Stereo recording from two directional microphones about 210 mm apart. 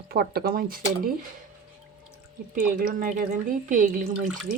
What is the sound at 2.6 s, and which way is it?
Speech, 40° right (ahead or behind).